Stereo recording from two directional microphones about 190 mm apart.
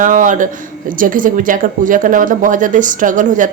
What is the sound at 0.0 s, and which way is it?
Speech, 45° right (ahead or behind).